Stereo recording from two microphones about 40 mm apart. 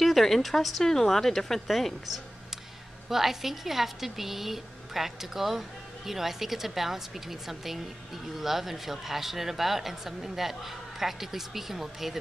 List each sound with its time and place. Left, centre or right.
0.0 s a woman's voice: centre